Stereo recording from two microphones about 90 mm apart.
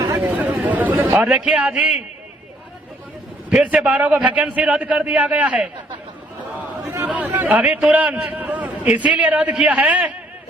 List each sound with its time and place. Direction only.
0.2 s chatter: 20° right (ahead or behind)
3.5 s a man's voice: 15° right (ahead or behind)
6.8 s a man's voice: 25° right (ahead or behind)